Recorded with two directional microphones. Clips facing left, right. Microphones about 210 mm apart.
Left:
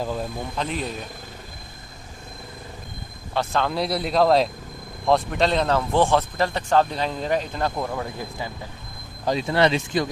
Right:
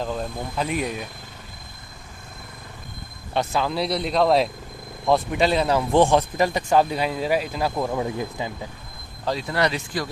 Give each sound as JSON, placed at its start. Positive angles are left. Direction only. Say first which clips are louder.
{"t": 0.0, "sound": "speech", "louder": "even", "side_deg": 5}
{"t": 0.5, "sound": "speech", "louder": "right 4 dB", "side_deg": -10}
{"t": 3.5, "sound": "speech", "louder": "left 1 dB", "side_deg": 0}
{"t": 9.2, "sound": "speech", "louder": "left 3 dB", "side_deg": 20}